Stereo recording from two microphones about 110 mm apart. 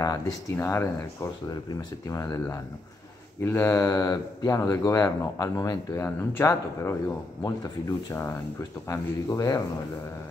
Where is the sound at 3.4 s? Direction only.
25° left (ahead or behind).